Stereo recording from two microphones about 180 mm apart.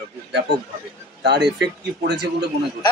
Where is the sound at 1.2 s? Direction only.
70° right (ahead or behind).